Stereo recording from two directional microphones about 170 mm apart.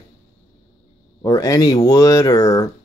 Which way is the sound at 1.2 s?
20° left (ahead or behind).